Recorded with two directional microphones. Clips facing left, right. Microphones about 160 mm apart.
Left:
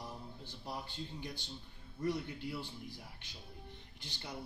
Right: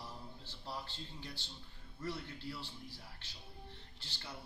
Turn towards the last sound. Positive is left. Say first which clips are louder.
# left 3 dB
turn(degrees=15)  # may be behind; listen again after turning